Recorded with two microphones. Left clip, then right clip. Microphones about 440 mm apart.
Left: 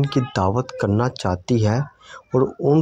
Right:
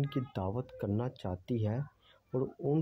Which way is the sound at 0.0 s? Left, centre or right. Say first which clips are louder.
Left 16 dB; right.